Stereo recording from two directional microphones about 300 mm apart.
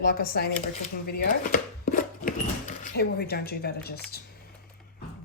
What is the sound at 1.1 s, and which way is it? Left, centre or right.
Chopping, left.